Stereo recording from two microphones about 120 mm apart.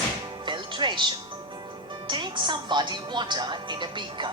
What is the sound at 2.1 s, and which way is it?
Speech, 40° right (ahead or behind).